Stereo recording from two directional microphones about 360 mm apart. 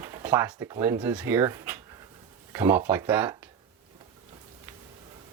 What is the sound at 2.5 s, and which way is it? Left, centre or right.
Speech, centre.